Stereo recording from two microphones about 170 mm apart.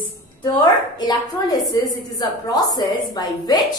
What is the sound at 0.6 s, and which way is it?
A woman's voice, 25° left (ahead or behind).